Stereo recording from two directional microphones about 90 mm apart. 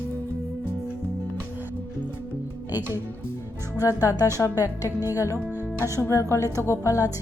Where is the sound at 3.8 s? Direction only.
40° left (ahead or behind).